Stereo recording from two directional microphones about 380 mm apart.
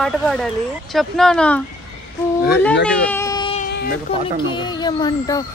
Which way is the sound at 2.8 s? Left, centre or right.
Centre.